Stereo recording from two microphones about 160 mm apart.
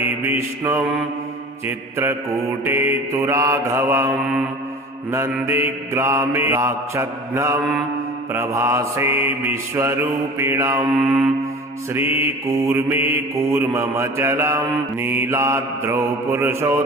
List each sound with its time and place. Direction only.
0.3 s mantra: 15° right (ahead or behind)